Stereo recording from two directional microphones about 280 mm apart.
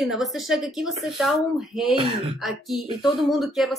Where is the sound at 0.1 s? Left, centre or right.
Centre.